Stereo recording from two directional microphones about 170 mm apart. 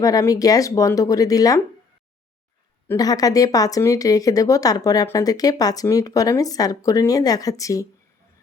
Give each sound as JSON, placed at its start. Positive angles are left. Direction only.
{"t": 0.0, "sound": "speech", "side_deg": 20}
{"t": 2.8, "sound": "speech", "side_deg": 20}